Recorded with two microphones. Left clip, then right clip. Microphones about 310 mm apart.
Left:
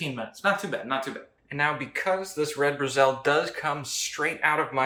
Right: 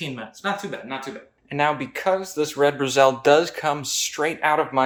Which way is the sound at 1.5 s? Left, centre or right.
Right.